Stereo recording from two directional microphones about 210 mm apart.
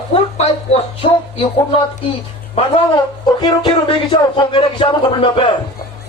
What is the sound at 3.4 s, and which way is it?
A man's voice, 25° left (ahead or behind).